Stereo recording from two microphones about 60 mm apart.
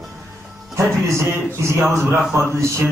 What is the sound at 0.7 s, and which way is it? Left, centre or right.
A man's voice, right.